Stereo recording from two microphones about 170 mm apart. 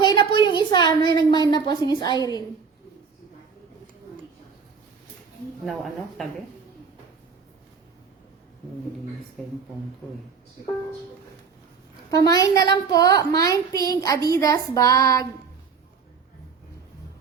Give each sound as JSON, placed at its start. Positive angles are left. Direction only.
{"t": 0.0, "sound": "a sound", "side_deg": 25}
{"t": 0.3, "sound": "a woman's voice", "side_deg": 25}
{"t": 5.6, "sound": "speech", "side_deg": 0}
{"t": 9.4, "sound": "speech", "side_deg": 5}
{"t": 12.1, "sound": "a woman's voice", "side_deg": 20}